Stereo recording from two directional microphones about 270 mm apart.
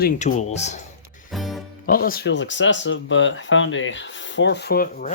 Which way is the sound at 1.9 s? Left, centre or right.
Left.